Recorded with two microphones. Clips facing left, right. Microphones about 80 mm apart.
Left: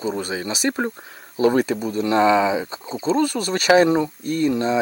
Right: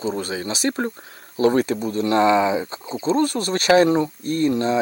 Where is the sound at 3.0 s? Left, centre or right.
Right.